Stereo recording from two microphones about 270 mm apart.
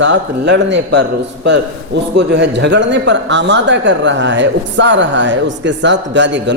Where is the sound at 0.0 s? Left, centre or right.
Right.